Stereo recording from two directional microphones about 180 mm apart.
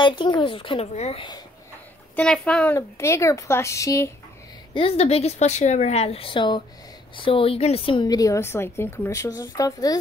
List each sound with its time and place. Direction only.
0.0 s a woman's voice: 25° left (ahead or behind)
2.1 s speech: 5° left (ahead or behind)
4.7 s a woman's voice: 35° left (ahead or behind)